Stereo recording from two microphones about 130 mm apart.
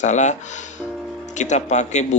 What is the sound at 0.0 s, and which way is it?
Speech, 65° left (ahead or behind).